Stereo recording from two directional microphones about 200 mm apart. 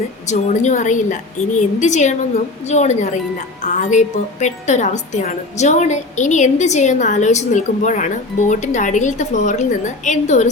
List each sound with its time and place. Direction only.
0.3 s a woman's voice: 35° left (ahead or behind)